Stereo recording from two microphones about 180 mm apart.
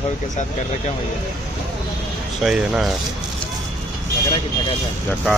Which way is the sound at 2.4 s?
5° right (ahead or behind).